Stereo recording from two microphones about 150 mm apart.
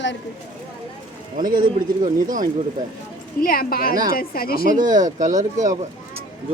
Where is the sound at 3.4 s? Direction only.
75° left (ahead or behind).